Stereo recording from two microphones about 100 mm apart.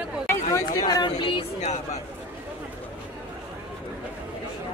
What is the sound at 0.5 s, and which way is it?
Speech, 35° left (ahead or behind).